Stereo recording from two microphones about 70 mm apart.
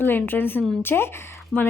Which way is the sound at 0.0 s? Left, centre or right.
Left.